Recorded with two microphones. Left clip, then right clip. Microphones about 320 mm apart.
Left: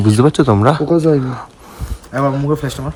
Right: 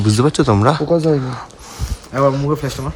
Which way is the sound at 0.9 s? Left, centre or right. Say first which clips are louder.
Left 2 dB; left.